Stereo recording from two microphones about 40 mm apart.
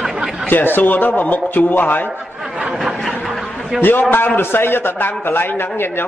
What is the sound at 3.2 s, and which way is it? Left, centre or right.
Snicker, centre.